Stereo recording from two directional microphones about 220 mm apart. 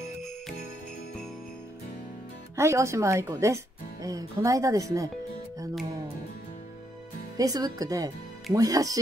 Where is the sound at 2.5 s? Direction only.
15° right (ahead or behind).